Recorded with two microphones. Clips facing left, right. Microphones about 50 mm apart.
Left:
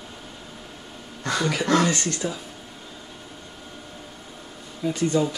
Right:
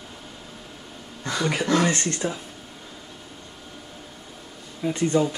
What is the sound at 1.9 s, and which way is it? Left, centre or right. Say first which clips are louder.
Speech: right 1 dB; right.